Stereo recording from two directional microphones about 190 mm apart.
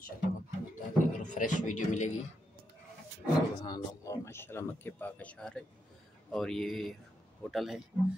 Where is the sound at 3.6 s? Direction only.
20° left (ahead or behind).